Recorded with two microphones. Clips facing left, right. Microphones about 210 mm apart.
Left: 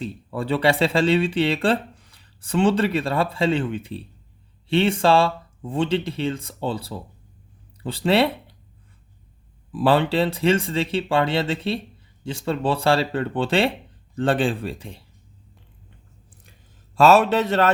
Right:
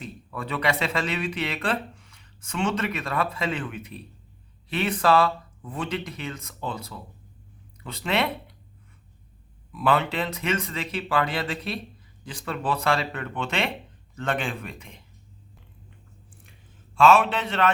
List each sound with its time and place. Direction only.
0.0 s speech: 30° left (ahead or behind)
9.7 s speech: 30° left (ahead or behind)
16.4 s a sound: 40° left (ahead or behind)